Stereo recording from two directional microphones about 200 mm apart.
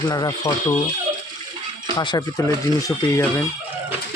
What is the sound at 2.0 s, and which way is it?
Speech, 20° left (ahead or behind).